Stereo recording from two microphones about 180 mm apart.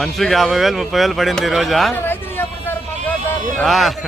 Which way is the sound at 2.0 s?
10° left (ahead or behind).